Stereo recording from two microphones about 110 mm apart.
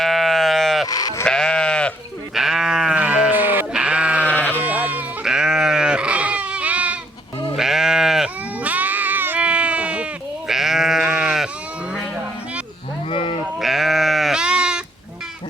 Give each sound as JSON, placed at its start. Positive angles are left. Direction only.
{"t": 0.0, "sound": "sheep", "side_deg": 0}
{"t": 0.9, "sound": "sheep", "side_deg": 35}
{"t": 1.2, "sound": "sheep", "side_deg": 5}
{"t": 2.3, "sound": "sheep", "side_deg": -5}
{"t": 4.3, "sound": "sheep", "side_deg": 15}
{"t": 4.6, "sound": "sheep", "side_deg": -15}
{"t": 8.6, "sound": "bleat", "side_deg": -15}
{"t": 13.1, "sound": "livestock", "side_deg": 55}
{"t": 13.6, "sound": "goat", "side_deg": 0}